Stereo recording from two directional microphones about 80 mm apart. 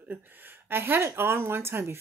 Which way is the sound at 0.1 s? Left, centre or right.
Right.